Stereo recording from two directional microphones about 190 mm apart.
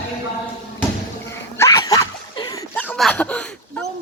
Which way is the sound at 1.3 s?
15° left (ahead or behind).